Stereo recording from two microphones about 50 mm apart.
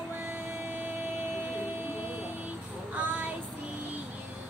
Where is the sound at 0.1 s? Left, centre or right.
Right.